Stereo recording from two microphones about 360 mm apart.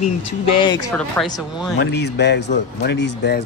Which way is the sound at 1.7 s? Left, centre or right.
Left.